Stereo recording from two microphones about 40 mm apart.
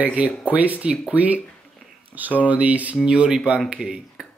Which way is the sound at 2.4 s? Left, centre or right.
Right.